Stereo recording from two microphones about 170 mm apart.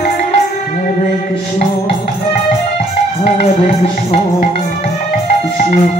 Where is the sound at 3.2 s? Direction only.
50° left (ahead or behind).